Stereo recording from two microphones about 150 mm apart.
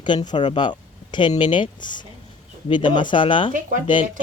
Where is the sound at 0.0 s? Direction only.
30° left (ahead or behind).